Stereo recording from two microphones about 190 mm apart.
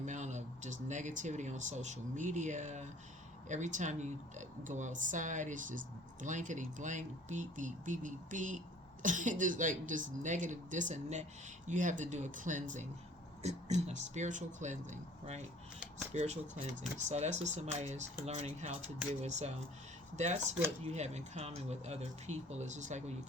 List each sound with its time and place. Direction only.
0.0 s speech: 40° right (ahead or behind)